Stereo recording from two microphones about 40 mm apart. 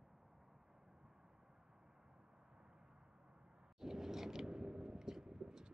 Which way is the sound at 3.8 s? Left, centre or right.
Centre.